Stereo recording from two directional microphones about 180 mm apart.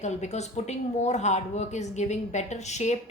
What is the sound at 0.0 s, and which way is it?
A woman's voice, 40° left (ahead or behind).